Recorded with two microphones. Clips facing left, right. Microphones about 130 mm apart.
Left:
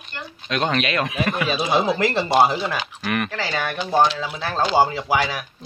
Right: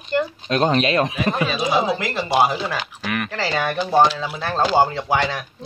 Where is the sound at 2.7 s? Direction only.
Centre (ahead or behind).